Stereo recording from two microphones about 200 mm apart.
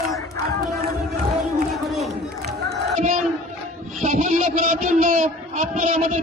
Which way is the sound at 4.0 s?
35° right (ahead or behind).